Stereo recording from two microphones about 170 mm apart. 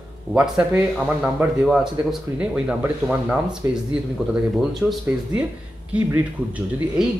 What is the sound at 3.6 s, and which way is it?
Speech, 15° right (ahead or behind).